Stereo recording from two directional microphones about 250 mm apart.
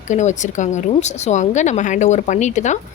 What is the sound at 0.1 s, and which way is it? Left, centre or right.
A woman's voice, left.